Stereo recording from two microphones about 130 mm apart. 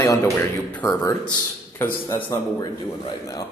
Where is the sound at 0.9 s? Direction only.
30° left (ahead or behind).